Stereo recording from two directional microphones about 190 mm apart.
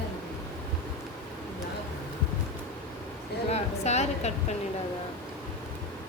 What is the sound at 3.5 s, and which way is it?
Speech, 35° left (ahead or behind).